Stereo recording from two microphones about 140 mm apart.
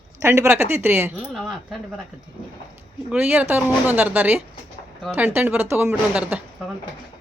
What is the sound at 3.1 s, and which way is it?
Speech, 10° right (ahead or behind).